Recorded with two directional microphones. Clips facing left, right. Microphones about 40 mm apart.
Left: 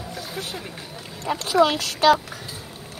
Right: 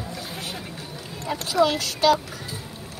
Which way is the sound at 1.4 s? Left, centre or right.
Left.